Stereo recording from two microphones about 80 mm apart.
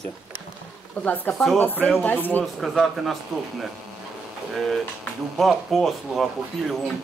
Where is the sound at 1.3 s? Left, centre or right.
Centre.